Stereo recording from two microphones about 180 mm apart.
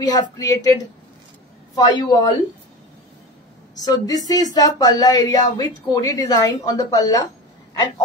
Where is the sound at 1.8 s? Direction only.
25° left (ahead or behind).